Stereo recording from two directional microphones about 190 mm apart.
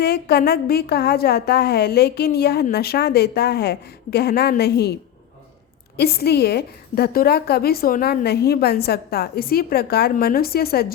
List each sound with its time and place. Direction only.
0.0 s a woman's voice: 55° left (ahead or behind)
6.0 s a woman's voice: 55° left (ahead or behind)